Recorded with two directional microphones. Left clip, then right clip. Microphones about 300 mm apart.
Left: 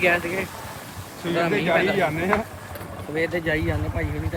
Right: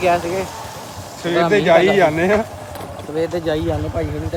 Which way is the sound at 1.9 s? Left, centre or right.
Right.